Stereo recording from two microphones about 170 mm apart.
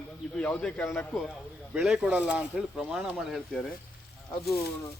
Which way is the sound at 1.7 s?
5° right (ahead or behind).